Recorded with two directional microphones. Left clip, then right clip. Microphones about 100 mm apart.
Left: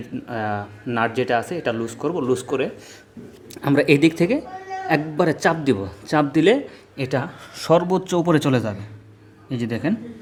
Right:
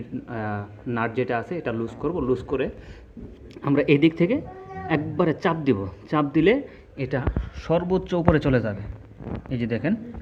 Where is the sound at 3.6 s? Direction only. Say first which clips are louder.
Left 3 dB; 30° left (ahead or behind).